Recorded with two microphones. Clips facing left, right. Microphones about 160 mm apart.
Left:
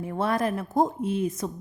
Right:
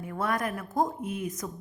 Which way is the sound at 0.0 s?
30° left (ahead or behind).